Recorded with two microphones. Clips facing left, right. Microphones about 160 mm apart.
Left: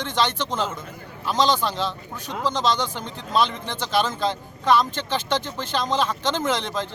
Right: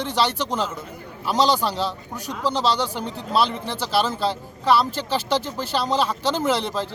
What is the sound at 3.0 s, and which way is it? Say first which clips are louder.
Speech: right 5 dB; 35° right (ahead or behind).